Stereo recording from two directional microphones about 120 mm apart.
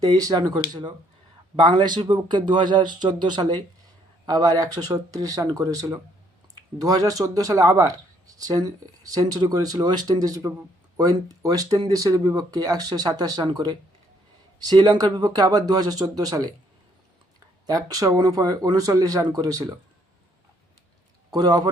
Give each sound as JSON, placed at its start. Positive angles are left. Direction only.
{"t": 0.1, "sound": "speech", "side_deg": -30}
{"t": 17.7, "sound": "speech", "side_deg": -30}
{"t": 21.3, "sound": "speech", "side_deg": -35}